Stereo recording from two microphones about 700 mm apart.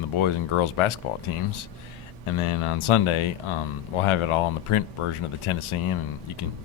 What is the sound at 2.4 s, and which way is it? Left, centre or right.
Speech, left.